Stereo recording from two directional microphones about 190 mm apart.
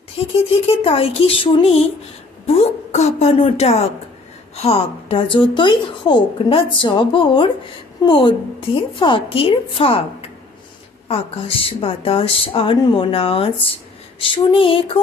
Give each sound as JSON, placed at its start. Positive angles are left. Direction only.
{"t": 0.5, "sound": "speech", "side_deg": 30}
{"t": 11.1, "sound": "speech", "side_deg": 30}